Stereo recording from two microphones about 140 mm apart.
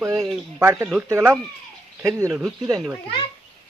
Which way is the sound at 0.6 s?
20° right (ahead or behind).